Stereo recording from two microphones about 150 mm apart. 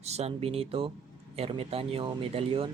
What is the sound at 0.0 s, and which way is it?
Speech, 45° right (ahead or behind).